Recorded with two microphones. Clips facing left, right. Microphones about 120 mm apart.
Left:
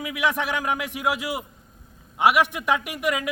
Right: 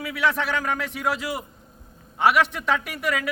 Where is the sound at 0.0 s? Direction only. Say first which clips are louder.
Right 1 dB; 15° left (ahead or behind).